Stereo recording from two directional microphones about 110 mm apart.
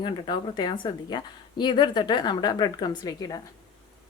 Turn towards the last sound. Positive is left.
turn(degrees=35)  # may be behind; listen again after turning